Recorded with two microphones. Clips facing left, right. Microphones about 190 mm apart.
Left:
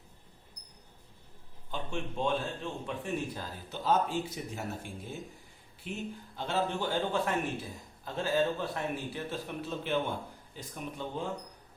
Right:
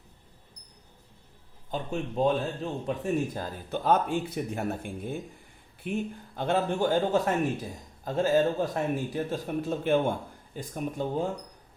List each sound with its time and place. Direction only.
1.7 s a man's voice: 40° right (ahead or behind)